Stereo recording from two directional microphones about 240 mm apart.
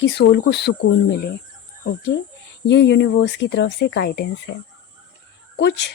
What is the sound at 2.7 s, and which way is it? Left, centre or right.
Speech, left.